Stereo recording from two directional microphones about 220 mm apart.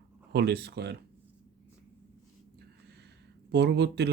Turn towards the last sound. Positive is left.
turn(degrees=-50)  # may be behind; listen again after turning